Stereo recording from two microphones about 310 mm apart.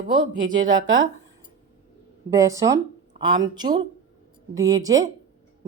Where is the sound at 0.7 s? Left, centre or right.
Right.